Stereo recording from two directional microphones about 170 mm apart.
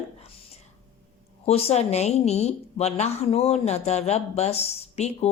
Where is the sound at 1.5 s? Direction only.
35° left (ahead or behind).